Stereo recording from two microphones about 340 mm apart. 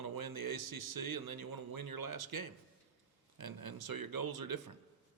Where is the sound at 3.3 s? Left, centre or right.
Right.